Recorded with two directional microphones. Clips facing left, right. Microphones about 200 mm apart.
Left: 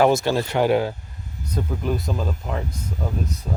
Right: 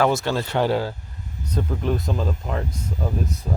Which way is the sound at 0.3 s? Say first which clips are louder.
Left 2 dB; 15° left (ahead or behind).